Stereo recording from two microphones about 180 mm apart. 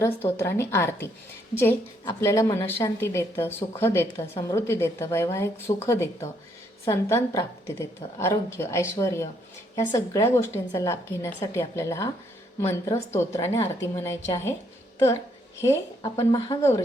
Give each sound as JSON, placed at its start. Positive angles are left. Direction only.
{"t": 0.0, "sound": "a woman's voice", "side_deg": 15}
{"t": 2.2, "sound": "a woman's voice", "side_deg": 15}